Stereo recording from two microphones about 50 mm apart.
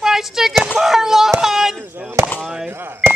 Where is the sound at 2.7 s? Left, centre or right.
Right.